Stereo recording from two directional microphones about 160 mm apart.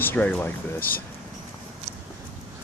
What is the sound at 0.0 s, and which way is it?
Speech, 15° left (ahead or behind).